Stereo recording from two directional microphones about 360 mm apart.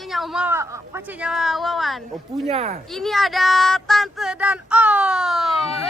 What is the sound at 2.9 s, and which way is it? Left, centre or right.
Speech, centre.